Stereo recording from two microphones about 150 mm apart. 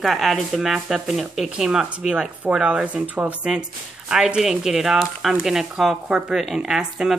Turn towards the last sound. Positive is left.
turn(degrees=-5)  # may be behind; listen again after turning